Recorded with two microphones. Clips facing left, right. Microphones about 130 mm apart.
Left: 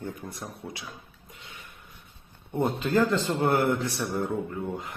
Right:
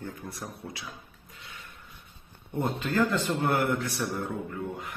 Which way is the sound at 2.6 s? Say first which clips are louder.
Left 3 dB; 30° left (ahead or behind).